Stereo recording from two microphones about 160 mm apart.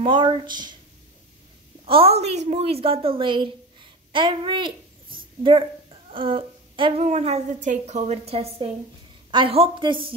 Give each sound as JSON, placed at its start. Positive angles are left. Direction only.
{"t": 0.0, "sound": "speech", "side_deg": -30}
{"t": 1.9, "sound": "a woman's voice", "side_deg": -35}